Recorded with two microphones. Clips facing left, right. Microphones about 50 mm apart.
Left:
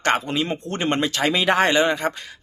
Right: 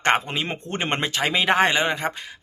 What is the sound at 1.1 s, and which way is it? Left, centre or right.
Speech, centre.